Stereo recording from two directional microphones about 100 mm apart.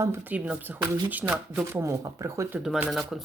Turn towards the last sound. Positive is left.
turn(degrees=0)  # may be behind; listen again after turning